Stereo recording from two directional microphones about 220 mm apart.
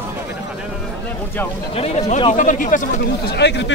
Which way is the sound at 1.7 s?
30° left (ahead or behind).